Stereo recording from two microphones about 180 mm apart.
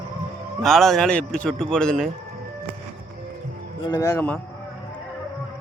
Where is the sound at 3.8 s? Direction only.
25° left (ahead or behind).